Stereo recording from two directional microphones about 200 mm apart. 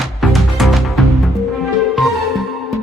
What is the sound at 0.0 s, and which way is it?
Music, centre (ahead or behind).